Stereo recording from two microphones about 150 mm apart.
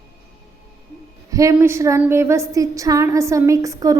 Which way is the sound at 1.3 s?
20° right (ahead or behind).